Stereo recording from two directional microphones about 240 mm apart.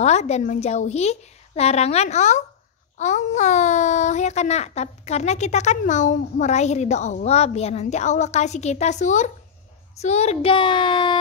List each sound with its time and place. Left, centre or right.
0.0 s a child's voice: left